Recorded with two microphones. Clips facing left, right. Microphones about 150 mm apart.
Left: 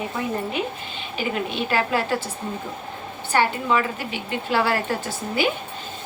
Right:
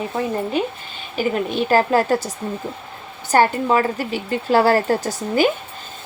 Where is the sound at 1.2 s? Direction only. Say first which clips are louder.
Right 5 dB; 40° right (ahead or behind).